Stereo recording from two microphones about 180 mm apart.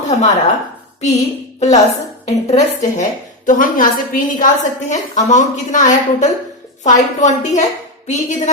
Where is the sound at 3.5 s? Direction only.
50° left (ahead or behind).